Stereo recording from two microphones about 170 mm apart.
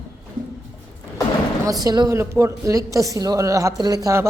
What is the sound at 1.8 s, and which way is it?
A woman's voice, 25° right (ahead or behind).